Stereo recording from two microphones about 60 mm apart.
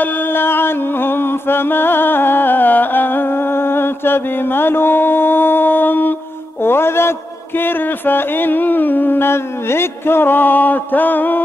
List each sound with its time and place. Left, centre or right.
0.0 s music: left
6.6 s a man's voice: left